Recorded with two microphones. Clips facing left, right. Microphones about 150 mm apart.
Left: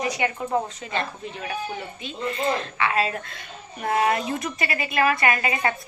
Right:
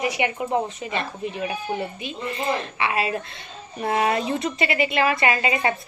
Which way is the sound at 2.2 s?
20° right (ahead or behind).